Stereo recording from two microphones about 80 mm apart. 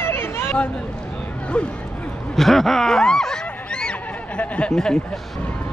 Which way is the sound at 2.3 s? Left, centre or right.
Centre.